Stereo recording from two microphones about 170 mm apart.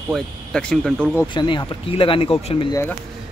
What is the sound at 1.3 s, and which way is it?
Speech, 30° left (ahead or behind).